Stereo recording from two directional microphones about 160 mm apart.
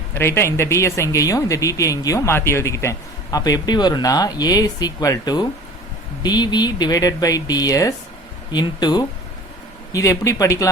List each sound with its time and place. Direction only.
0.1 s speech: 15° left (ahead or behind)